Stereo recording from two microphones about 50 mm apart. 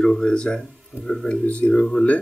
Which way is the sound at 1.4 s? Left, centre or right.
Left.